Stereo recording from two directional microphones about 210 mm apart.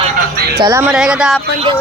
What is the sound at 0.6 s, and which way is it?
Speech, 15° right (ahead or behind).